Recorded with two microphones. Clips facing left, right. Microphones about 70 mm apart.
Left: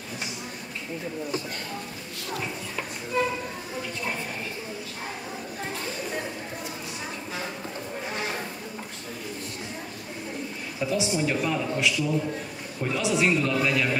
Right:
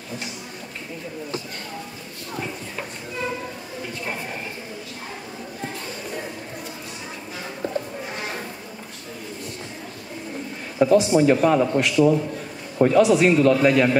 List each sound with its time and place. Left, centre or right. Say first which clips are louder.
10.8 s a man's voice: right 10 dB; right
13.6 s a man's voice: right 8 dB; right